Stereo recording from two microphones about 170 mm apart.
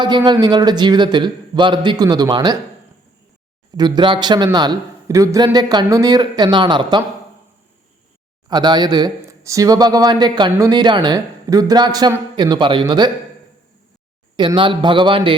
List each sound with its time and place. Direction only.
0.3 s speech: 25° right (ahead or behind)
3.8 s speech: 25° right (ahead or behind)
8.4 s speech: 25° right (ahead or behind)
14.3 s speech: 30° right (ahead or behind)